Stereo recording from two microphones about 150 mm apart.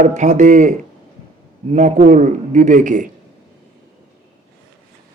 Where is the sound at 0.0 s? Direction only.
55° right (ahead or behind).